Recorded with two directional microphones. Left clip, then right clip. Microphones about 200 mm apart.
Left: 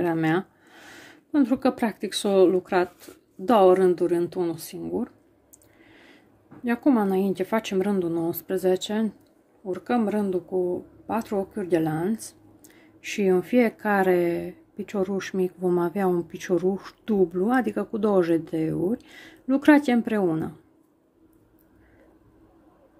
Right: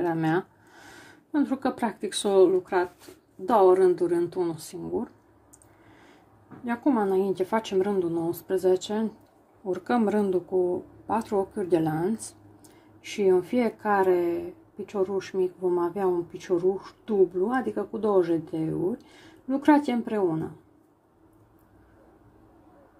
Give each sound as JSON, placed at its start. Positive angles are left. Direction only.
{"t": 0.0, "sound": "speech", "side_deg": 20}
{"t": 6.6, "sound": "speech", "side_deg": 20}
{"t": 9.7, "sound": "speech", "side_deg": 0}